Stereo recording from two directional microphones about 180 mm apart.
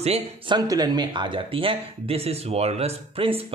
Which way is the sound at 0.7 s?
20° right (ahead or behind).